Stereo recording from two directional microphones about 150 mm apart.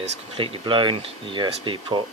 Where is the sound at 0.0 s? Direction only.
35° right (ahead or behind).